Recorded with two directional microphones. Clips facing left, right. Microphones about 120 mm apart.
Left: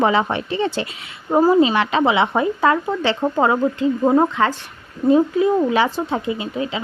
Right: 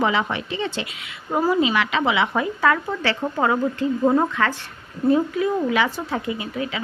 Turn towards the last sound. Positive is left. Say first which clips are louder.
# left 3 dB
turn(degrees=25)  # may be behind; listen again after turning